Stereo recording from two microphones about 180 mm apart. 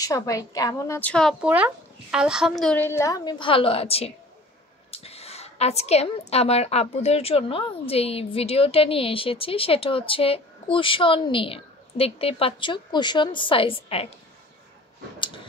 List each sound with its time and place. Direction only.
0.0 s a woman's voice: 20° left (ahead or behind)
1.4 s a woman's voice: 5° right (ahead or behind); by 14.0 s 30° left (ahead or behind)
15.1 s a sound: 25° left (ahead or behind)